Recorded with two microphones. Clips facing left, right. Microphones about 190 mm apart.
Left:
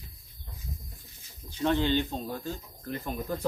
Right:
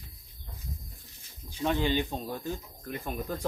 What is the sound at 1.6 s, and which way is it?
Speech, 10° right (ahead or behind).